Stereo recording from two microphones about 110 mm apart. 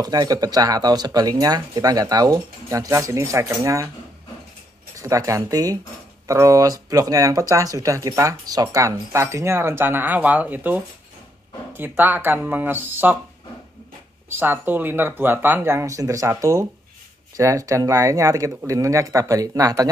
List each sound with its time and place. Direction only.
0.0 s speech: 35° right (ahead or behind)
4.9 s speech: 30° right (ahead or behind)
12.0 s speech: 15° right (ahead or behind)
14.3 s speech: 20° right (ahead or behind)